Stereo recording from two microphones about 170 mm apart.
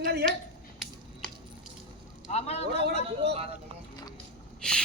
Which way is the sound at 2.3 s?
40° left (ahead or behind).